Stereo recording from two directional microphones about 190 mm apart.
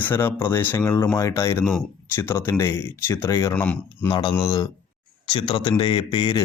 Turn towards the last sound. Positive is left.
turn(degrees=25)  # may be behind; listen again after turning